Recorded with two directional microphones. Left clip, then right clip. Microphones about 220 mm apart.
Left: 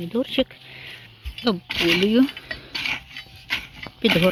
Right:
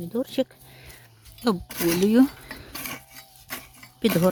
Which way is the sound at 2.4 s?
15° right (ahead or behind).